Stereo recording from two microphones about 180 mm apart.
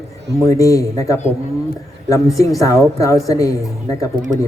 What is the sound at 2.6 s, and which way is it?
Speech, 20° left (ahead or behind).